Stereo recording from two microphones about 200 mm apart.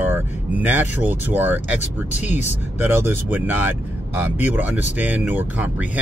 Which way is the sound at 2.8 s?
10° right (ahead or behind).